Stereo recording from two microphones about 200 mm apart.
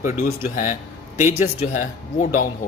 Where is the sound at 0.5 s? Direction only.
40° left (ahead or behind).